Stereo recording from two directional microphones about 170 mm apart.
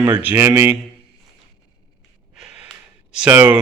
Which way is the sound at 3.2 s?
10° right (ahead or behind).